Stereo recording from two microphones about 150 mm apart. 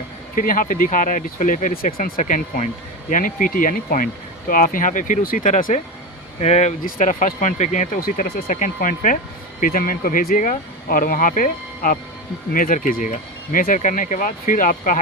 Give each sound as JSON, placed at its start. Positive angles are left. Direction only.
{"t": 0.3, "sound": "speech", "side_deg": 65}
{"t": 6.4, "sound": "speech", "side_deg": 50}